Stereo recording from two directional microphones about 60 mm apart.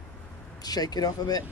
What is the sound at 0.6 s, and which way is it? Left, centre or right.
Speech, left.